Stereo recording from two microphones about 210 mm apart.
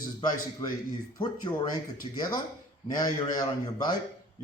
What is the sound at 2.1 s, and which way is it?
Speech, 20° left (ahead or behind).